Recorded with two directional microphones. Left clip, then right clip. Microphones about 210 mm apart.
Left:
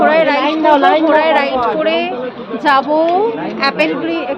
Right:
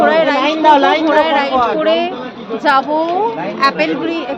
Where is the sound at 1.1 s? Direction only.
5° left (ahead or behind).